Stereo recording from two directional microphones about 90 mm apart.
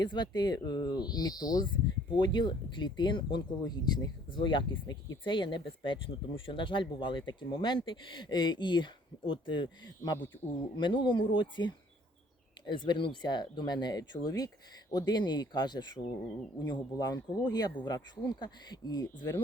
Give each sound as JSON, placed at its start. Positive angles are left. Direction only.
{"t": 0.0, "sound": "speech", "side_deg": 55}
{"t": 1.6, "sound": "speech", "side_deg": 65}
{"t": 10.8, "sound": "speech", "side_deg": 60}